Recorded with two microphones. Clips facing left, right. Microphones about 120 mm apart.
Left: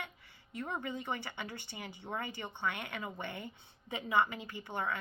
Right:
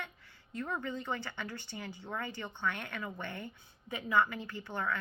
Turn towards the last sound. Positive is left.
turn(degrees=20)  # may be behind; listen again after turning